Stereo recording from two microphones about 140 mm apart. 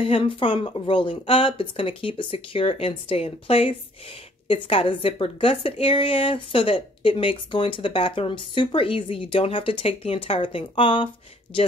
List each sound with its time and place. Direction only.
0.0 s a woman's voice: 40° left (ahead or behind)